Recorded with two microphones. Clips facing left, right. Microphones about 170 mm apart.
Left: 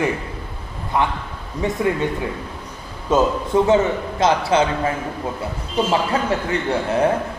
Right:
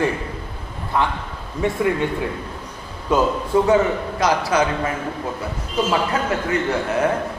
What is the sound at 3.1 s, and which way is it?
A man's voice, 25° left (ahead or behind).